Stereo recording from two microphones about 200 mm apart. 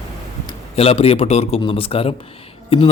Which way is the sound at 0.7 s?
30° left (ahead or behind).